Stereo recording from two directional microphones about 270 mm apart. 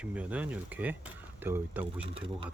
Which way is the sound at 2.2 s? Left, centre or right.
Centre.